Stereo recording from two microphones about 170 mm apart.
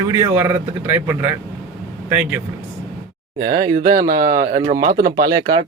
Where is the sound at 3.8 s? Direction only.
55° right (ahead or behind).